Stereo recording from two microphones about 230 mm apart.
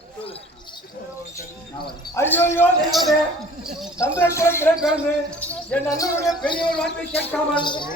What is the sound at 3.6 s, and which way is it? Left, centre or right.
Speech, centre.